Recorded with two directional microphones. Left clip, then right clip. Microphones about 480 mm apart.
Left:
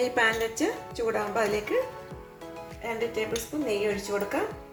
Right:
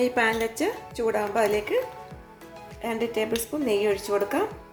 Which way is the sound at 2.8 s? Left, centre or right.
Right.